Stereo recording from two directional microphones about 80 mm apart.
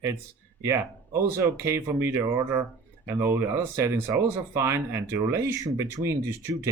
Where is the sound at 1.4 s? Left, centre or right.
Right.